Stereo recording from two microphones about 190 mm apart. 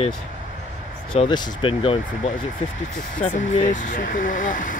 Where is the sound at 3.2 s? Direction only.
40° left (ahead or behind).